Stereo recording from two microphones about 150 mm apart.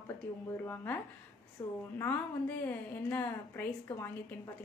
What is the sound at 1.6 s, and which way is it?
Speech, 25° left (ahead or behind).